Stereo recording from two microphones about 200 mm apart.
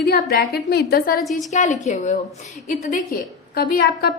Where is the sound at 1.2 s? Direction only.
Centre (ahead or behind).